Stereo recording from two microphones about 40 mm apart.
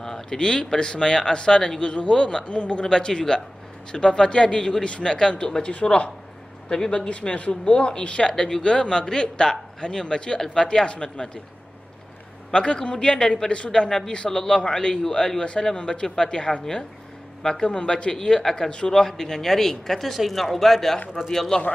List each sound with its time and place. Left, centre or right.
0.0 s speech: centre; by 2.8 s left
2.8 s speech: centre
12.4 s speech: left
13.7 s speech: centre